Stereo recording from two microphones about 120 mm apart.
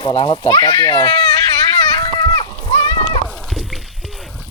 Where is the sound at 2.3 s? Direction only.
40° left (ahead or behind).